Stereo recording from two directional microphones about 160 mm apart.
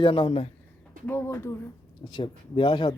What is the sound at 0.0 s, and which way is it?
Speech, 35° left (ahead or behind).